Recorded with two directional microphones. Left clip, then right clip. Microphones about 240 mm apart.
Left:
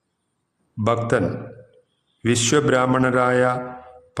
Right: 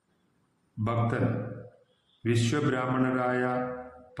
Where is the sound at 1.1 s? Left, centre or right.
Left.